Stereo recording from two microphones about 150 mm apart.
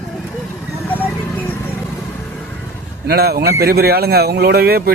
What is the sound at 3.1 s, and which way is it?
A man's voice, 90° right.